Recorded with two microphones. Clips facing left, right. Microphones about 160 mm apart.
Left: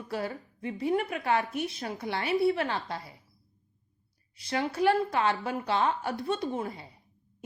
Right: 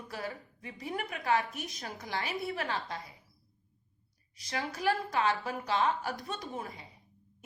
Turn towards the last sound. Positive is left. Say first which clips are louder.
# left 8 dB
turn(degrees=30)  # may be behind; listen again after turning